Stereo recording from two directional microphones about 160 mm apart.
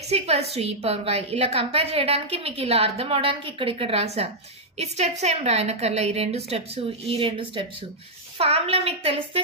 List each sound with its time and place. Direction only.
0.1 s a woman's voice: 40° right (ahead or behind)